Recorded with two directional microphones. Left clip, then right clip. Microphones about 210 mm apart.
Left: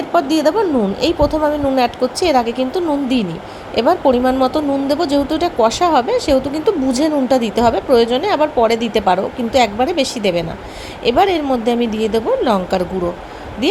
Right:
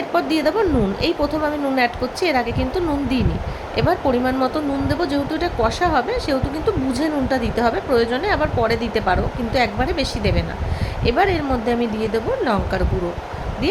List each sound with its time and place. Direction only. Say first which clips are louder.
0.1 s speech: left 5 dB; 15° left (ahead or behind)